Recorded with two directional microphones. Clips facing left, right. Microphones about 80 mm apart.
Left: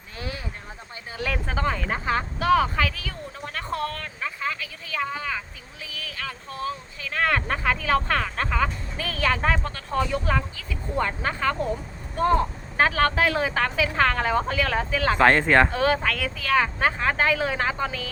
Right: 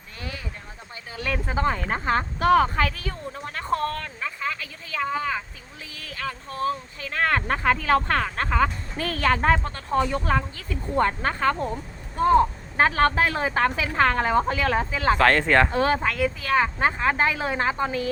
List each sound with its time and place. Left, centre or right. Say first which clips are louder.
1.5 s speech: right 3 dB; right
4.6 s a sound: right 1 dB; right
5.8 s speech: right 2 dB; right
12.7 s speech: right 1 dB; right
15.2 s speech: left 2 dB; centre
15.7 s speech: even; right